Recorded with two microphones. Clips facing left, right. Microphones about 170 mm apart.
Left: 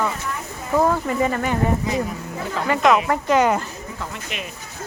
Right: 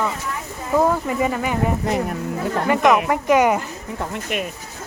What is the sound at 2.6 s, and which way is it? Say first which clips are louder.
Speech: even; 15° right (ahead or behind).